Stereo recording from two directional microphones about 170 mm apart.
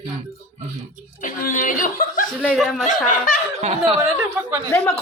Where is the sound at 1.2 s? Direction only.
55° left (ahead or behind).